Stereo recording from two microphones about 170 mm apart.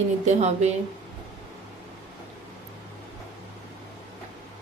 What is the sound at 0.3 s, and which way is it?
Speech, 40° right (ahead or behind).